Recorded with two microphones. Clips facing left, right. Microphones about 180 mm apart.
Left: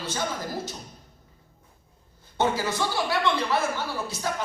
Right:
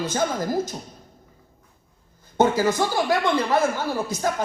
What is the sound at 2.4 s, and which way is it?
A woman's voice, 45° right (ahead or behind).